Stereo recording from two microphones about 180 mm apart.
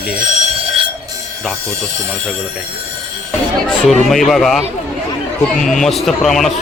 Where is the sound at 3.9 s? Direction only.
Centre (ahead or behind).